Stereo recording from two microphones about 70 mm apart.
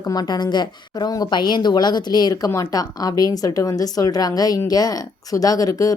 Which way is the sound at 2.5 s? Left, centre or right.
Left.